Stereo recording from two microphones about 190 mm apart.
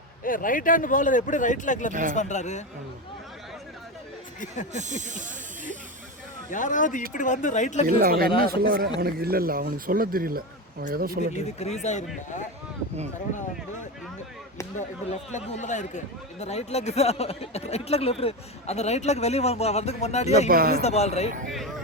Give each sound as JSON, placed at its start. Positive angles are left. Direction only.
{"t": 0.3, "sound": "speech", "side_deg": 45}
{"t": 1.9, "sound": "speech", "side_deg": -45}
{"t": 2.1, "sound": "a man's voice", "side_deg": 40}
{"t": 4.7, "sound": "snake", "side_deg": -40}
{"t": 6.5, "sound": "a man's voice", "side_deg": 45}
{"t": 7.9, "sound": "speech", "side_deg": -50}
{"t": 11.3, "sound": "a man's voice", "side_deg": 35}
{"t": 14.8, "sound": "a man's voice", "side_deg": 40}
{"t": 20.5, "sound": "speech", "side_deg": -50}
{"t": 20.8, "sound": "a man's voice", "side_deg": 35}